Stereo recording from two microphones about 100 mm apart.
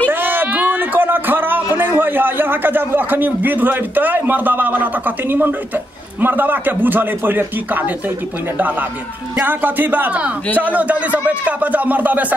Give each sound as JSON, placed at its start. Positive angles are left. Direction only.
{"t": 0.1, "sound": "a sound", "side_deg": -20}
{"t": 1.8, "sound": "a man's voice", "side_deg": -20}
{"t": 9.4, "sound": "speech", "side_deg": -20}